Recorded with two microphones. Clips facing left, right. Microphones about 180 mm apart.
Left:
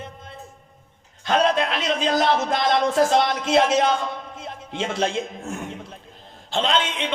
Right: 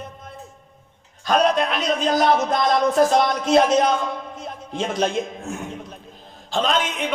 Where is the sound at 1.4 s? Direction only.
25° left (ahead or behind).